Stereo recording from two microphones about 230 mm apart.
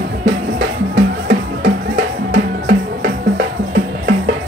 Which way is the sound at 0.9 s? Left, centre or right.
Right.